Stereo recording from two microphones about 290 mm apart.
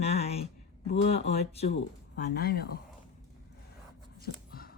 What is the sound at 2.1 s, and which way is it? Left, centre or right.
Speech, left.